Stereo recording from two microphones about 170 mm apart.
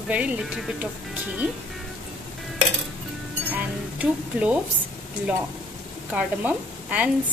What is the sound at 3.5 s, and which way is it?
Music, 10° right (ahead or behind).